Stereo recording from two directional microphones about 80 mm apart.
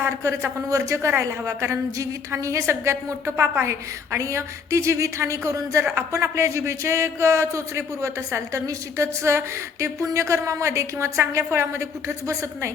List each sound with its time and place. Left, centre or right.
0.0 s a woman's voice: right